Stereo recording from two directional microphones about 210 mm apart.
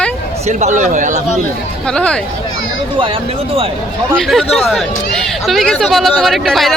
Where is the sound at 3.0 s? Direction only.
25° right (ahead or behind).